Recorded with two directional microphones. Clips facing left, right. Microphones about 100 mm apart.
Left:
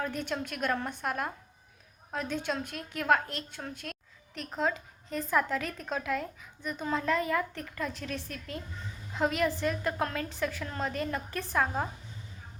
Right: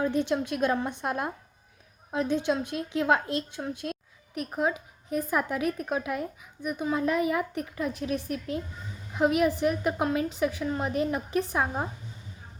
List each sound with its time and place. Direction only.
0.0 s a woman's voice: 20° right (ahead or behind)